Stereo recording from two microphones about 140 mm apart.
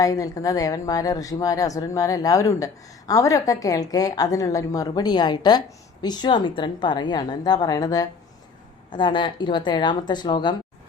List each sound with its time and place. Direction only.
0.0 s a woman's voice: 25° left (ahead or behind)